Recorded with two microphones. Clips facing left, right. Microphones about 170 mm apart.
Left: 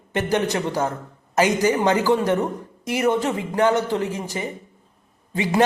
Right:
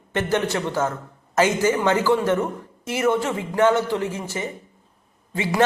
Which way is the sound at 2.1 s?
20° left (ahead or behind).